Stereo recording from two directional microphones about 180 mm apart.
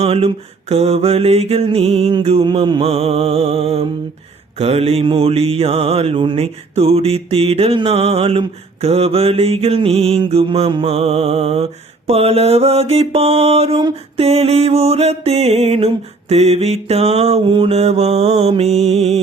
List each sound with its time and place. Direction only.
0.0 s mantra: 35° right (ahead or behind)